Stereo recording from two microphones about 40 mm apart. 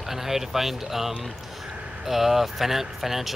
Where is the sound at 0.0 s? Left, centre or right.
Centre.